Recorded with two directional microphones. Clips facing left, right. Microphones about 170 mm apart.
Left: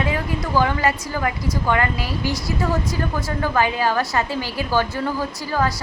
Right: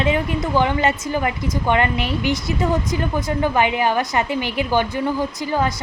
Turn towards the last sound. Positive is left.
turn(degrees=-20)  # may be behind; listen again after turning